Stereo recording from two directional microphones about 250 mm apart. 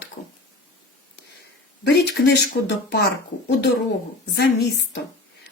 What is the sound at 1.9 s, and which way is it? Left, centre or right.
Speech, left.